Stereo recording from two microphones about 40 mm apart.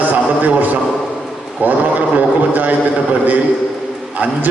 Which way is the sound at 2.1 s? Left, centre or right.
Right.